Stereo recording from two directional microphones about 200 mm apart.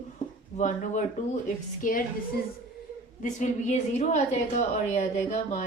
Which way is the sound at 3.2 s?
35° left (ahead or behind).